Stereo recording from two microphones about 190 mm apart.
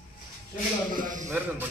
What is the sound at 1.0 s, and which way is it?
Speech, 45° right (ahead or behind).